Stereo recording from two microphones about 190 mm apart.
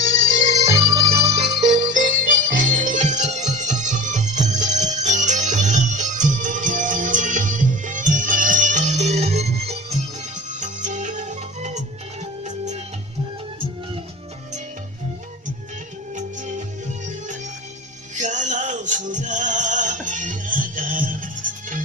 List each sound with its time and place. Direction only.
0.1 s music: 40° right (ahead or behind)
0.7 s music: 20° right (ahead or behind)
1.6 s music: 40° right (ahead or behind)
16.1 s music: 40° right (ahead or behind)
18.2 s music: 40° right (ahead or behind)